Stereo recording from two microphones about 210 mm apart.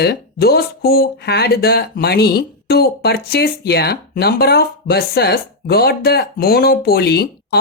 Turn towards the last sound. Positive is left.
turn(degrees=50)  # may be behind; listen again after turning